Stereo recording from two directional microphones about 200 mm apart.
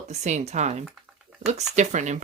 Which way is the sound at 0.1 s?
35° right (ahead or behind).